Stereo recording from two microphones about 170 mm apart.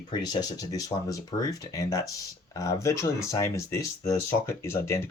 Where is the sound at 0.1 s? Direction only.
25° left (ahead or behind).